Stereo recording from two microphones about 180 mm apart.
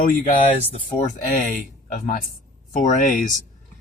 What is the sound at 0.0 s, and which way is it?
Speech, 50° left (ahead or behind).